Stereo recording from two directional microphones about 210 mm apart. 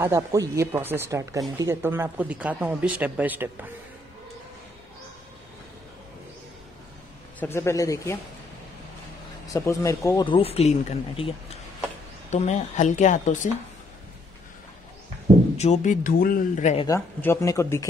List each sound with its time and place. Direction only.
0.0 s speech: 15° right (ahead or behind)
7.3 s speech: 10° left (ahead or behind)
9.5 s speech: 15° left (ahead or behind); by 13.5 s 35° left (ahead or behind)
15.5 s speech: 30° left (ahead or behind)
16.8 s speech: 15° left (ahead or behind)